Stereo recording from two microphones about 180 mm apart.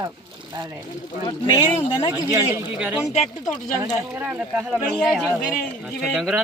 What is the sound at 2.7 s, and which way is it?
A man's voice, 5° right (ahead or behind).